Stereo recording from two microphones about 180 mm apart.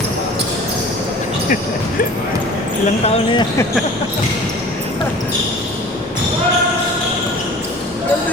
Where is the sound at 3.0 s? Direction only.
30° left (ahead or behind).